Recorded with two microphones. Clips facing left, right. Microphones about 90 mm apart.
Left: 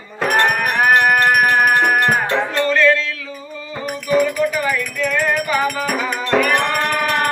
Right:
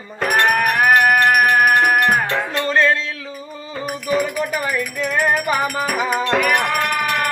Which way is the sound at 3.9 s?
5° right (ahead or behind).